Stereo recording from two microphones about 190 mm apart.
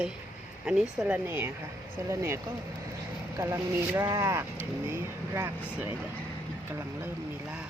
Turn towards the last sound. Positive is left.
turn(degrees=-10)  # may be behind; listen again after turning